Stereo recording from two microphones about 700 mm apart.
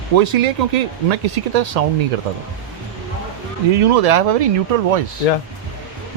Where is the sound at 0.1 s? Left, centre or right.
Right.